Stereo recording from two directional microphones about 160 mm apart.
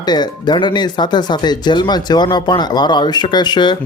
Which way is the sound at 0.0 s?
25° left (ahead or behind).